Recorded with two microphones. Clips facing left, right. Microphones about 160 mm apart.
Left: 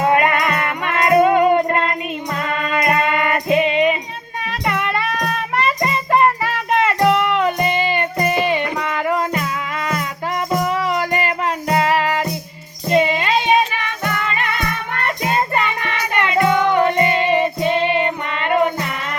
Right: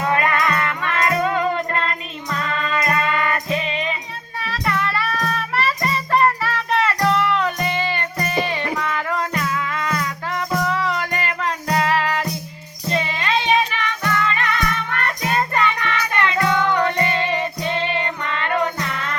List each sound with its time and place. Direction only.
0.0 s music: 20° left (ahead or behind)